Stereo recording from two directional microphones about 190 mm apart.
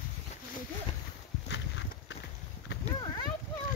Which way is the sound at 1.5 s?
70° left (ahead or behind).